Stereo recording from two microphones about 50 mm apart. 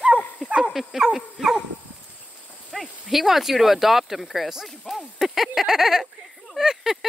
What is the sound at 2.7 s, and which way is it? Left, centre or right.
Speech, centre.